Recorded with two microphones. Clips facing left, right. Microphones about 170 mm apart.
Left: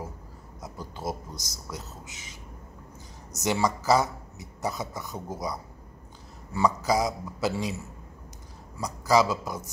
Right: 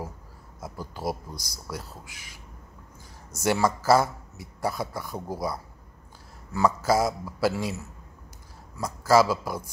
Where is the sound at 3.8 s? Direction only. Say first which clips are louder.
Right 2 dB; 15° left (ahead or behind).